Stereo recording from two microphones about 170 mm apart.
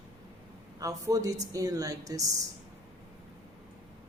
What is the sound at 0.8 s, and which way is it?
Speech, 20° right (ahead or behind).